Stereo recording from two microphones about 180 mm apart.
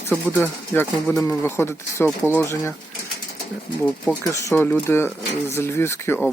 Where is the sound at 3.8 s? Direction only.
10° left (ahead or behind).